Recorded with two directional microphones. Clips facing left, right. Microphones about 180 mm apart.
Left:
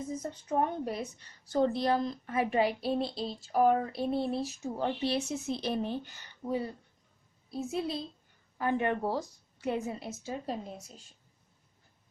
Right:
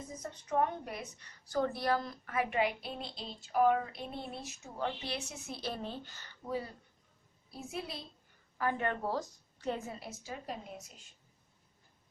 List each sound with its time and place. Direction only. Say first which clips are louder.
0.2 s a woman's voice: even; 30° left (ahead or behind)